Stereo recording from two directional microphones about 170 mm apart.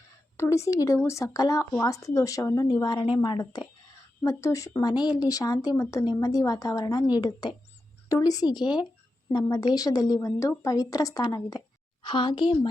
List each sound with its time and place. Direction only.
0.3 s speech: 15° left (ahead or behind)